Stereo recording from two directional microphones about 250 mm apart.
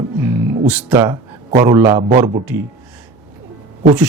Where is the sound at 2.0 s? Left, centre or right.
Right.